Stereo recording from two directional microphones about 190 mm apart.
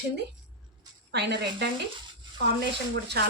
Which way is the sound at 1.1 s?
60° right (ahead or behind).